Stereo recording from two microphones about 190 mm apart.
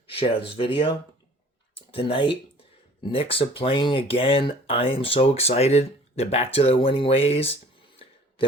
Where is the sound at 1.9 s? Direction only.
25° left (ahead or behind).